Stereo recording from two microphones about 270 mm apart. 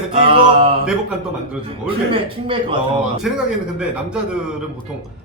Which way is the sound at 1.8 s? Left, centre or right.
Centre.